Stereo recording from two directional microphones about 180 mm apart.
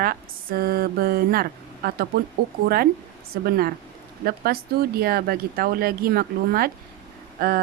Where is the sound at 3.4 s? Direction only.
55° right (ahead or behind).